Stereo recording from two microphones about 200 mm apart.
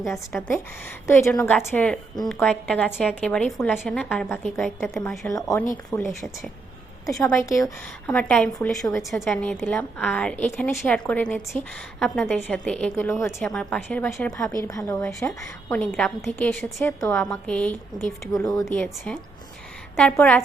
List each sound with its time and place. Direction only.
0.3 s a woman's voice: 5° left (ahead or behind)
5.3 s a woman's voice: 15° left (ahead or behind)
8.1 s a woman's voice: 5° left (ahead or behind)
14.6 s a woman's voice: 15° left (ahead or behind)
18.3 s a woman's voice: 15° left (ahead or behind)
18.6 s a woman's voice: 5° left (ahead or behind)